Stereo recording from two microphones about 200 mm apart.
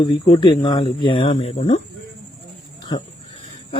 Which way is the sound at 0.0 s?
20° left (ahead or behind).